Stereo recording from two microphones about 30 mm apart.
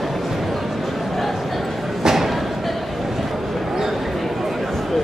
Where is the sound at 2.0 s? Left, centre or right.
Centre.